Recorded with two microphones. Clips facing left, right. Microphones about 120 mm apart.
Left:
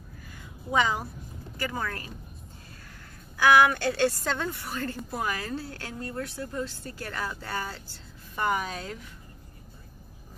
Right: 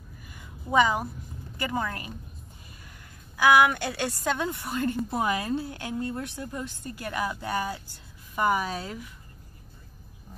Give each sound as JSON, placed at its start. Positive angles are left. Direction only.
{"t": 1.6, "sound": "speech", "side_deg": -20}
{"t": 3.3, "sound": "a woman's voice", "side_deg": -15}